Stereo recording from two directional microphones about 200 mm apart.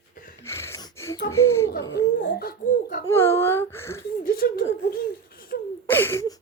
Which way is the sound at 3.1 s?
10° left (ahead or behind).